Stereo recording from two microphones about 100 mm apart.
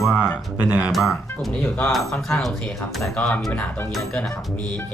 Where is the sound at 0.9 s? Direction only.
Centre (ahead or behind).